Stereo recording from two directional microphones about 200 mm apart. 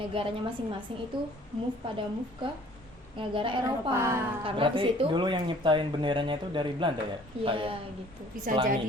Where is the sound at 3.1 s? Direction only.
25° right (ahead or behind).